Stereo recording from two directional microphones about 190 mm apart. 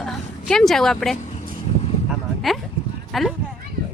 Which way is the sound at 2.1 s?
Centre (ahead or behind).